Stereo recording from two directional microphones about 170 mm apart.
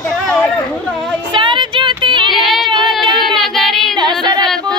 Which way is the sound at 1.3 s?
30° right (ahead or behind).